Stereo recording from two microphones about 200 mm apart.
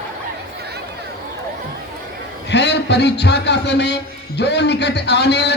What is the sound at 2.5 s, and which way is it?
A man's voice, 60° left (ahead or behind).